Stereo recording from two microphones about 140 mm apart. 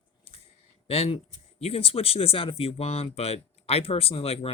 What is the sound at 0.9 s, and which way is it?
Speech, 45° left (ahead or behind).